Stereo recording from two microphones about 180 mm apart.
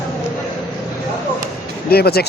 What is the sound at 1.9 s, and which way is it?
Speech, 60° left (ahead or behind).